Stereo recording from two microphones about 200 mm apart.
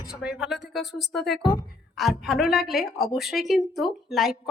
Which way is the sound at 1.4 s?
20° left (ahead or behind).